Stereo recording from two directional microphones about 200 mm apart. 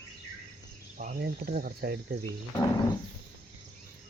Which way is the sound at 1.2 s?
50° right (ahead or behind).